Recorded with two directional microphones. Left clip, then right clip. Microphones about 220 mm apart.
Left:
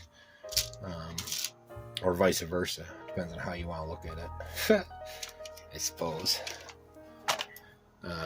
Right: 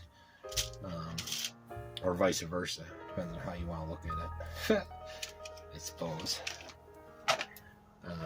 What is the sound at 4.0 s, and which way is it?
Speech, 50° left (ahead or behind).